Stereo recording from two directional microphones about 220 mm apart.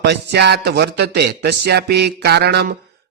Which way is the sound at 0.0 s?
50° right (ahead or behind).